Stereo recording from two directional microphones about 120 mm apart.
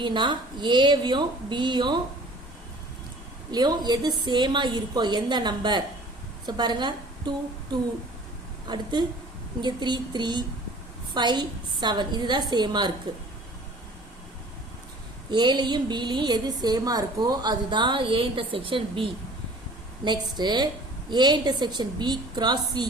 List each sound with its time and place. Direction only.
0.0 s a woman's voice: 40° right (ahead or behind)
3.5 s a woman's voice: 35° right (ahead or behind)
15.3 s a woman's voice: 40° right (ahead or behind)